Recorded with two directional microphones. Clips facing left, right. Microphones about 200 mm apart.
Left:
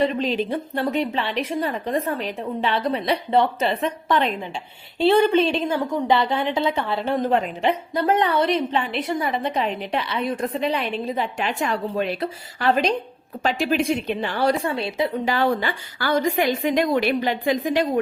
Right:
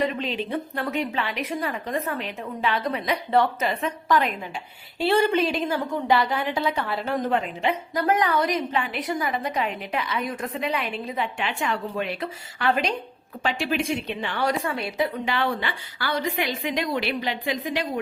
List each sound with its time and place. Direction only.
0.0 s a woman's voice: 35° left (ahead or behind)
15.2 s a woman's voice: 40° left (ahead or behind)